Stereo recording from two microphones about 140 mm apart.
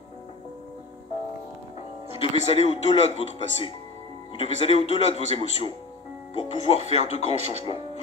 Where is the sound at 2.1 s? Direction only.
45° left (ahead or behind).